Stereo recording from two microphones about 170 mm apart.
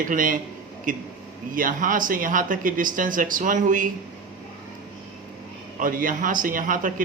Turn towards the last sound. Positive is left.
turn(degrees=-55)  # may be behind; listen again after turning